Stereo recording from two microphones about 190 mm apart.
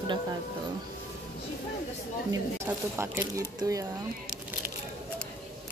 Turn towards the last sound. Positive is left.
turn(degrees=-20)  # may be behind; listen again after turning